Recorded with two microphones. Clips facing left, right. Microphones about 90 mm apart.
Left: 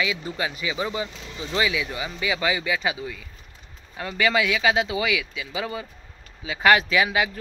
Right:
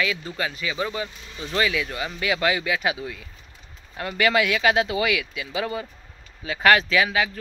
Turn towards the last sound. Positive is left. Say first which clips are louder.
# even
turn(degrees=15)  # may be behind; listen again after turning